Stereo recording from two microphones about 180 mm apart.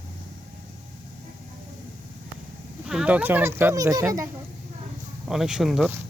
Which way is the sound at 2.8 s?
5° right (ahead or behind).